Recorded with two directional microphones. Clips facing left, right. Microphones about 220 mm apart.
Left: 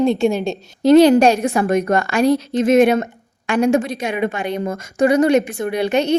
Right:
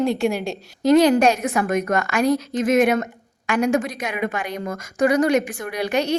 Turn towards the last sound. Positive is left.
turn(degrees=25)  # may be behind; listen again after turning